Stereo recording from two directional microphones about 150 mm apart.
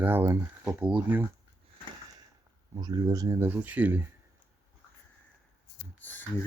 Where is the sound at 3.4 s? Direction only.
10° right (ahead or behind).